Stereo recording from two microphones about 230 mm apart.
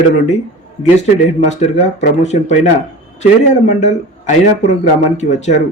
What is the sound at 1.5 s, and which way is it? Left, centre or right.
Speech, left.